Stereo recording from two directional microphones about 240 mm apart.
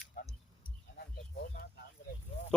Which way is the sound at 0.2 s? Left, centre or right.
Left.